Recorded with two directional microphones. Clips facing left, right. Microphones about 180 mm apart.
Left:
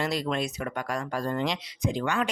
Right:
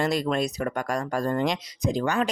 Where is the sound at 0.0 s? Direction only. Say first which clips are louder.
Right 4 dB; 50° right (ahead or behind).